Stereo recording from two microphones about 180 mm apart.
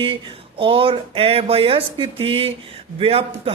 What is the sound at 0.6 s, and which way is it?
Speech, 30° right (ahead or behind).